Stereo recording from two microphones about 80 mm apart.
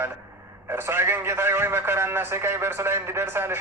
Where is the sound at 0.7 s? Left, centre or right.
Right.